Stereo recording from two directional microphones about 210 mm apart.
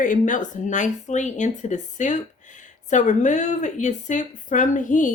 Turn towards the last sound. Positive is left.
turn(degrees=35)  # may be behind; listen again after turning